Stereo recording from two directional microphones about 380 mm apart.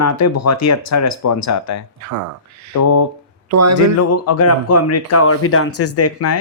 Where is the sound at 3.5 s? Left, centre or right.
Right.